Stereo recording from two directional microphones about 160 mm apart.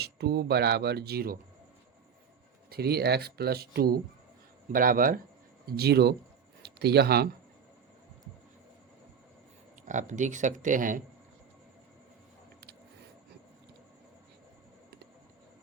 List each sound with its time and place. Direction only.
0.0 s speech: 90° right; by 1.4 s 75° right (ahead or behind)
2.6 s speech: 80° right
4.7 s speech: 60° right (ahead or behind)
5.6 s speech: 80° right
9.8 s speech: 50° right (ahead or behind)